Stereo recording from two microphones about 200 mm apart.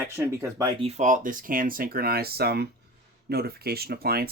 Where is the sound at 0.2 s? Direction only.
15° right (ahead or behind).